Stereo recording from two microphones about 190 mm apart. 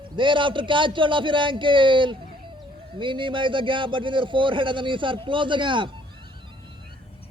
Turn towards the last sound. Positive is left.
turn(degrees=-25)  # may be behind; listen again after turning